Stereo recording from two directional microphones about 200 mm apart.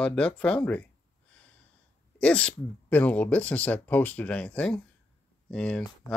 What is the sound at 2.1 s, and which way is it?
Speech, 5° left (ahead or behind).